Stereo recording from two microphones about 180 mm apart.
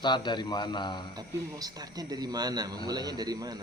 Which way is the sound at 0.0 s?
25° left (ahead or behind).